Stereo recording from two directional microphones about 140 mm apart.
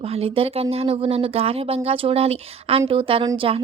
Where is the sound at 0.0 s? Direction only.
45° right (ahead or behind).